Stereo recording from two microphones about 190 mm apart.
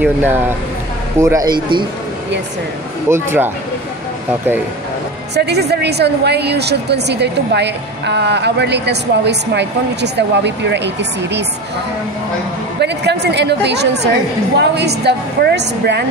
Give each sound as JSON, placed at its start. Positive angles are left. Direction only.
{"t": 0.0, "sound": "speech", "side_deg": -10}
{"t": 3.1, "sound": "speech", "side_deg": -10}
{"t": 5.3, "sound": "a woman's voice", "side_deg": -60}
{"t": 12.8, "sound": "a woman's voice", "side_deg": -60}